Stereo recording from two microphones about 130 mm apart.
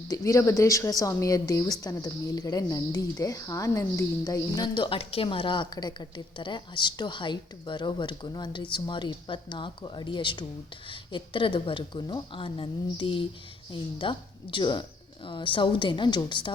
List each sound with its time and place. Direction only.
0.1 s a woman's voice: 25° left (ahead or behind)